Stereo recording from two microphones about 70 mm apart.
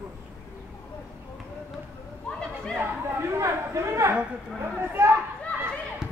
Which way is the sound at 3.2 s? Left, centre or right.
Right.